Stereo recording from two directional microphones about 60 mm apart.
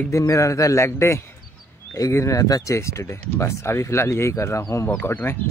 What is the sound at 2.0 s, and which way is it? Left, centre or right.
Speech, left.